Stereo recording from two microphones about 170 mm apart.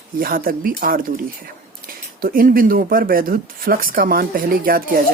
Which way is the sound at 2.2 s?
55° right (ahead or behind).